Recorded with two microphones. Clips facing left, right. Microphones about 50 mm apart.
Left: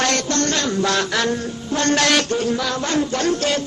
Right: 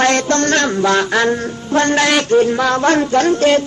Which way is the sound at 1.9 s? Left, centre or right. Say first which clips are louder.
Right 4 dB; right.